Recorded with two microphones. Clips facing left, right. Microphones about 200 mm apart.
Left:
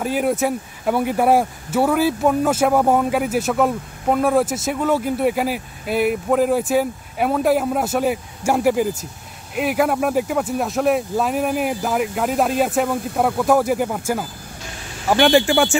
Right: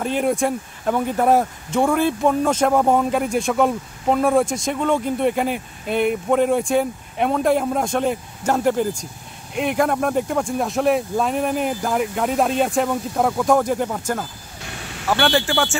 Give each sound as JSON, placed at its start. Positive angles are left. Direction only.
{"t": 0.0, "sound": "speech", "side_deg": 5}